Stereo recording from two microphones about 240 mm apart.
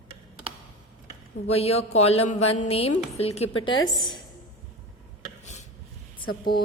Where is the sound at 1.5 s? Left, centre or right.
Left.